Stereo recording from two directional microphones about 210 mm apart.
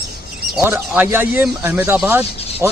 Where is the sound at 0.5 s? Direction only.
10° right (ahead or behind).